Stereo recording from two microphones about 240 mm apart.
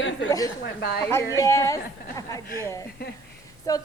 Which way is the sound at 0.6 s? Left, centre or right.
Left.